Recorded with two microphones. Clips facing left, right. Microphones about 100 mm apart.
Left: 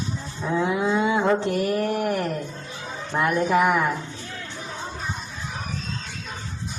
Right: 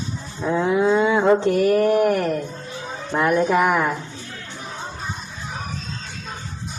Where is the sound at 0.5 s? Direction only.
40° right (ahead or behind).